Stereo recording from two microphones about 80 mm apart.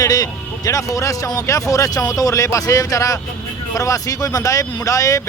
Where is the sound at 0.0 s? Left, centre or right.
Left.